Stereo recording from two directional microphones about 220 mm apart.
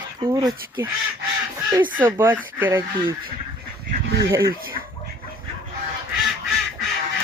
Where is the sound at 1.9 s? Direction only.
10° right (ahead or behind).